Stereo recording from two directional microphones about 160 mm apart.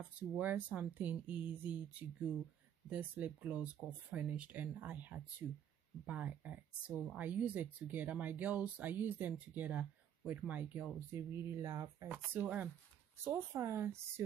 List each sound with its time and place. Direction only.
0.0 s speech: 10° right (ahead or behind)
12.1 s speech: 10° right (ahead or behind)